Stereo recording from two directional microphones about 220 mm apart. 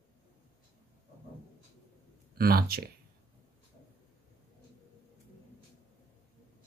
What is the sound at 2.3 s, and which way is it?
Speech, 45° right (ahead or behind).